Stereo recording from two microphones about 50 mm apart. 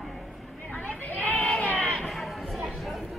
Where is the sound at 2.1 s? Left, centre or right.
Centre.